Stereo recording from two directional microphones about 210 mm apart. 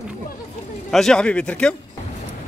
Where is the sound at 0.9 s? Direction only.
5° left (ahead or behind).